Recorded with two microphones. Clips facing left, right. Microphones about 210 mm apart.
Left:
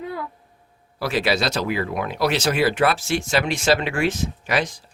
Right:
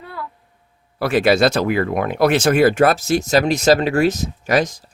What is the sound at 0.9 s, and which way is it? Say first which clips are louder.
Speech: right 7 dB; 55° right (ahead or behind).